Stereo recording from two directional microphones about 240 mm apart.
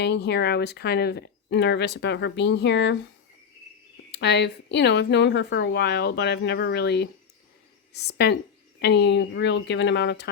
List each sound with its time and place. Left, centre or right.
0.0 s speech: left
4.1 s speech: left